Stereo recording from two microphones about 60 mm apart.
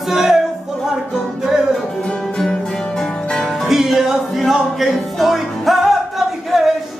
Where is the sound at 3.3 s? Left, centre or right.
Centre.